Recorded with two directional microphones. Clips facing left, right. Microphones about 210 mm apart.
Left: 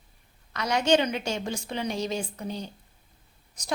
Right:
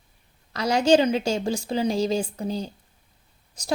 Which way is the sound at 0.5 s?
30° right (ahead or behind).